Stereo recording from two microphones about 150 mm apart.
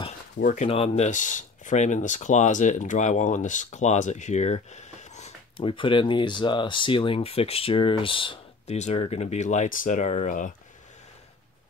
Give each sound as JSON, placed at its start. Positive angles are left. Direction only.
{"t": 0.4, "sound": "speech", "side_deg": 60}
{"t": 0.7, "sound": "speech", "side_deg": 40}
{"t": 5.6, "sound": "speech", "side_deg": 35}
{"t": 8.7, "sound": "speech", "side_deg": 50}